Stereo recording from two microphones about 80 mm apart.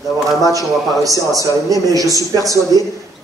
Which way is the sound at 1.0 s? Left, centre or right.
Right.